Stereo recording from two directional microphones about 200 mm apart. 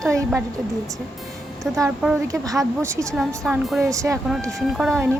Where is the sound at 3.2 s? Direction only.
Centre (ahead or behind).